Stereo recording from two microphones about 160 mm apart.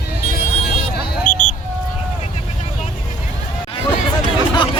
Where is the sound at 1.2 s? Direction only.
55° left (ahead or behind).